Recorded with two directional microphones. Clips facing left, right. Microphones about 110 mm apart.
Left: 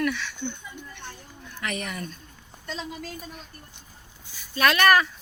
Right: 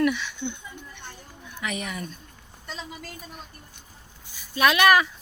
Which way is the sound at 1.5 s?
5° right (ahead or behind).